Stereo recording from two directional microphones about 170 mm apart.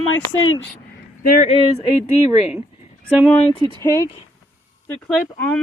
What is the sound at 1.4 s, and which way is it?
Speech, 35° left (ahead or behind).